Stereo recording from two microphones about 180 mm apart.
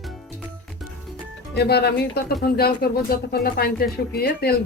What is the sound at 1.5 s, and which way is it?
Speech, 60° left (ahead or behind).